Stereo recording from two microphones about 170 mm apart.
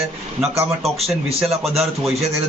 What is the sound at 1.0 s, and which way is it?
Speech, centre (ahead or behind).